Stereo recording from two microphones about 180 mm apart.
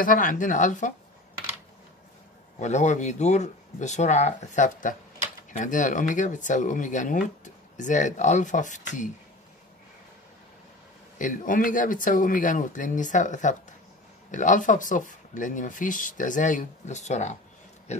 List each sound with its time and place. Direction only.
0.0 s speech: 50° left (ahead or behind)
2.6 s speech: 40° left (ahead or behind)
11.1 s speech: 45° left (ahead or behind)